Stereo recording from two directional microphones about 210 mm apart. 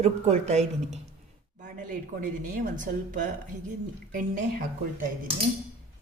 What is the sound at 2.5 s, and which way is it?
Speech, 40° right (ahead or behind).